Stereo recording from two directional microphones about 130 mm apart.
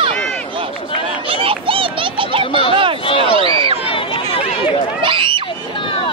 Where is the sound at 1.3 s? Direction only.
45° right (ahead or behind).